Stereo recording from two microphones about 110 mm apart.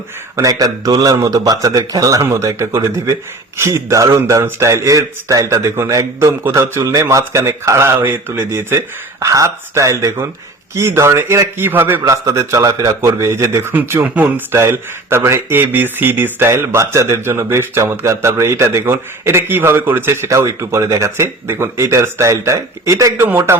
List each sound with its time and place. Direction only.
0.3 s a man's voice: 35° right (ahead or behind)
23.1 s a man's voice: 20° right (ahead or behind)